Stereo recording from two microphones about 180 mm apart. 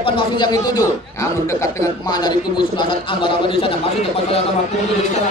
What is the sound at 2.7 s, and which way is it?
Speech, 30° left (ahead or behind).